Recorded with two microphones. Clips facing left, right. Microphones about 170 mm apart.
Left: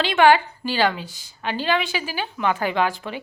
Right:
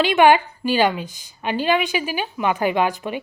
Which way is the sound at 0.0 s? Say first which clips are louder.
Right 2 dB; 15° right (ahead or behind).